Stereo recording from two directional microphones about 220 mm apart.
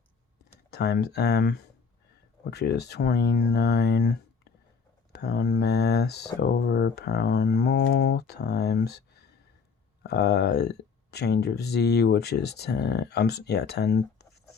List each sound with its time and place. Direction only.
0.7 s speech: 50° left (ahead or behind)
5.1 s speech: 50° left (ahead or behind)